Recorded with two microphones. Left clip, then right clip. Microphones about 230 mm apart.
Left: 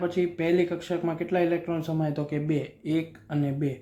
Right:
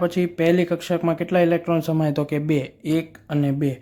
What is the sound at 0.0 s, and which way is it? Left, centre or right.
Speech, right.